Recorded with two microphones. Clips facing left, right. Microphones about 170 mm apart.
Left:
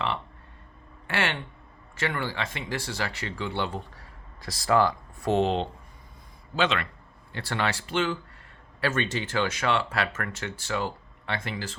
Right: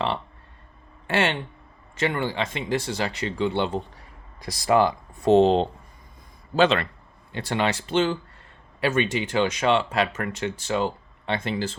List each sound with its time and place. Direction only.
1.0 s a man's voice: 25° right (ahead or behind)
7.3 s speech: 20° right (ahead or behind)
8.8 s speech: 15° right (ahead or behind)